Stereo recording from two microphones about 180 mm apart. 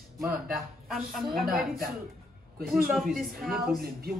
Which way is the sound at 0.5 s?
Centre (ahead or behind).